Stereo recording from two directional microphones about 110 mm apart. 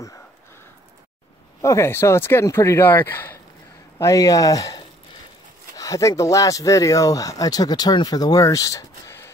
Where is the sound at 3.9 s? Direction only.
30° left (ahead or behind).